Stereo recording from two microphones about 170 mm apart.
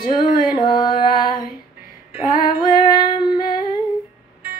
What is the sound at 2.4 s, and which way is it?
Female singing, 25° left (ahead or behind).